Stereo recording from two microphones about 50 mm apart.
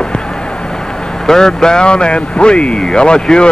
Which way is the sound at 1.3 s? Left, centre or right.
Centre.